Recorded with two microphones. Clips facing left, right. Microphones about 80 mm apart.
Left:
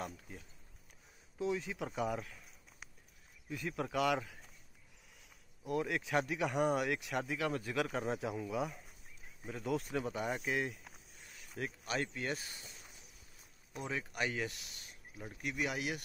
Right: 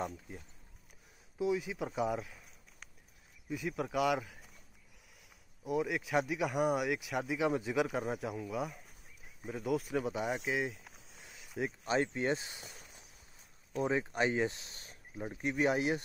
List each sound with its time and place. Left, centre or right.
1.4 s speech: centre
3.4 s speech: centre
5.6 s speech: centre
11.4 s a sound: centre
11.8 s speech: right
13.7 s speech: right